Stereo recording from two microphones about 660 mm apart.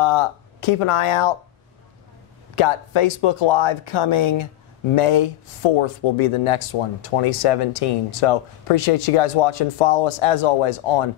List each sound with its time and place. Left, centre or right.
0.0 s speech: left
2.5 s speech: left